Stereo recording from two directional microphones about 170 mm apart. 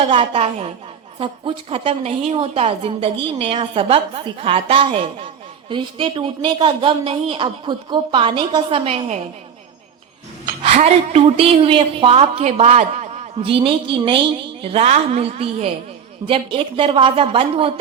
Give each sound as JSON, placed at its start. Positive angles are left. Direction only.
{"t": 0.0, "sound": "a woman's voice", "side_deg": -35}
{"t": 10.6, "sound": "a woman's voice", "side_deg": -40}